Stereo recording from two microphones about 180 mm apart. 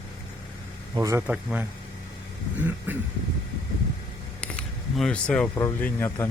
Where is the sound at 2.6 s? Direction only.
10° right (ahead or behind).